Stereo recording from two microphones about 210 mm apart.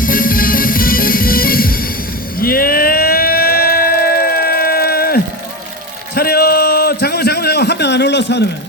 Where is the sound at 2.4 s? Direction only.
45° left (ahead or behind).